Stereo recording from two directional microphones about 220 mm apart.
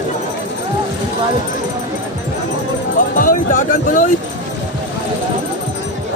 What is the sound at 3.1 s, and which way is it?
Music, 40° left (ahead or behind).